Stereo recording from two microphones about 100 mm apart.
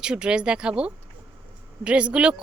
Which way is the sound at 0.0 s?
10° right (ahead or behind).